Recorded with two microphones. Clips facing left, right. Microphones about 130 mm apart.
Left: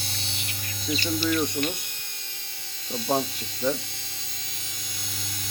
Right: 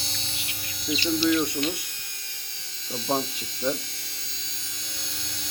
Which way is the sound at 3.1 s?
5° left (ahead or behind).